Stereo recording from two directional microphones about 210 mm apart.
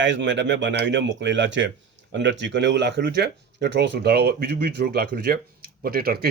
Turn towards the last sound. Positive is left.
turn(degrees=-45)  # may be behind; listen again after turning